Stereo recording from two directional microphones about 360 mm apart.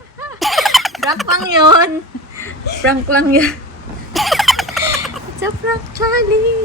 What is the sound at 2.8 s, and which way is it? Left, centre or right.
Speech, centre.